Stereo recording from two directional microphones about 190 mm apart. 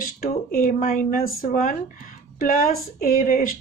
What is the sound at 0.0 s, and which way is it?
Speech, 45° left (ahead or behind).